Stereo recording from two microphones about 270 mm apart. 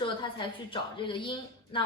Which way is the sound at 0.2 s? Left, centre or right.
Centre.